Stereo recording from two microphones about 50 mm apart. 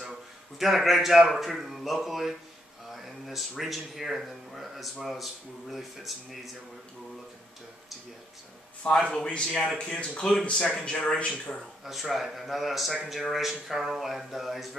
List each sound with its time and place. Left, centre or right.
0.0 s a man's voice: centre
8.8 s speech: centre
11.5 s speech: centre